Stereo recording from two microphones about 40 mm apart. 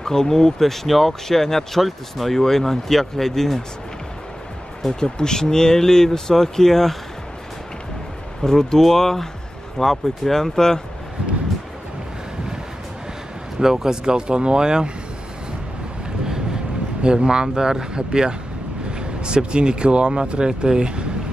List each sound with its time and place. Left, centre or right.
0.0 s speech: centre
5.0 s speech: centre
8.5 s speech: centre
13.6 s speech: centre
16.3 s speech: centre